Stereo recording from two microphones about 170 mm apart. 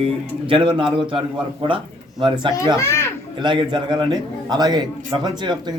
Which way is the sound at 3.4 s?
25° right (ahead or behind).